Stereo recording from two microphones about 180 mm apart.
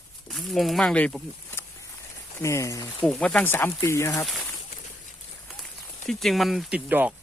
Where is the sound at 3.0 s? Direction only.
5° left (ahead or behind).